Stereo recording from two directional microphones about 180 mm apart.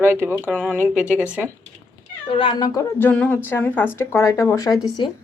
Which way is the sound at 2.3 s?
25° left (ahead or behind).